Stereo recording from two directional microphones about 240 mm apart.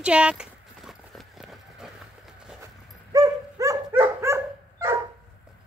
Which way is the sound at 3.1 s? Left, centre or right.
Centre.